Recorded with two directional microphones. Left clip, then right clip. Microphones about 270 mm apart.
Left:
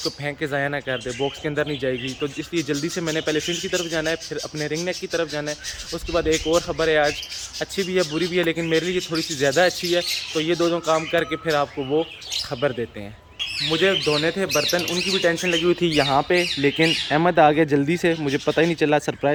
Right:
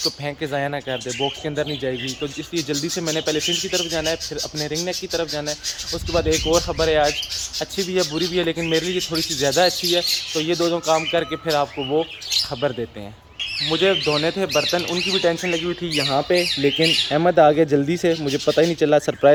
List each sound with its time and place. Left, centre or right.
0.0 s speech: centre
13.7 s speech: centre
15.6 s speech: left
16.0 s speech: centre